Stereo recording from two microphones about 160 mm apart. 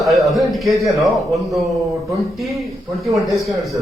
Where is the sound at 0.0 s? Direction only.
Centre (ahead or behind).